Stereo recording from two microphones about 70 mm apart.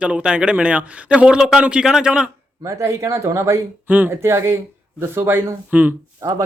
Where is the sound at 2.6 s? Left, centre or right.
Right.